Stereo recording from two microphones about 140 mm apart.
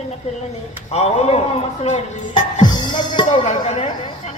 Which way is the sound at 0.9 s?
50° left (ahead or behind).